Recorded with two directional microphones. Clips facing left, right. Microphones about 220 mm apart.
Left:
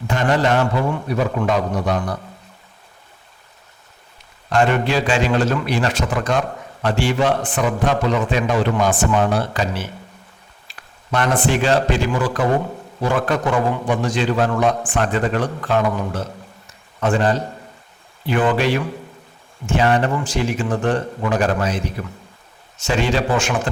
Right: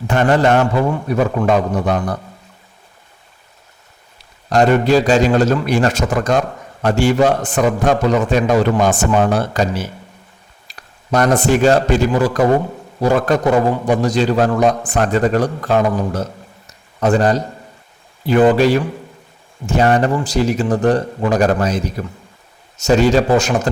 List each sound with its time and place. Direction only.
0.1 s a man's voice: 55° right (ahead or behind)
4.4 s a man's voice: 40° right (ahead or behind)
16.6 s a sound: 40° right (ahead or behind)
18.3 s a man's voice: 40° right (ahead or behind)